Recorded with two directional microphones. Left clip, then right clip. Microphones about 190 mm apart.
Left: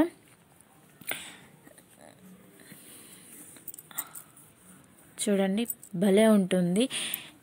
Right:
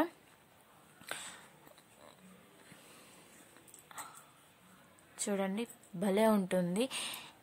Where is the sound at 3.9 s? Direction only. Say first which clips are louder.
Left 4 dB; 10° left (ahead or behind).